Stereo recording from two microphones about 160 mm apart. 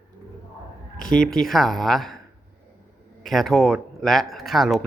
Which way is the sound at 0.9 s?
60° left (ahead or behind).